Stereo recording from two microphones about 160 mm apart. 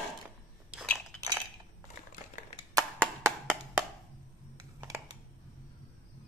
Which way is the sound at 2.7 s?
15° right (ahead or behind).